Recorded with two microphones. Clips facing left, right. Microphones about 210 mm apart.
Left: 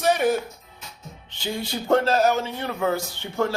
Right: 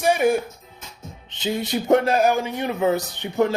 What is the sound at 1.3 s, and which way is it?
A man's voice, 20° right (ahead or behind).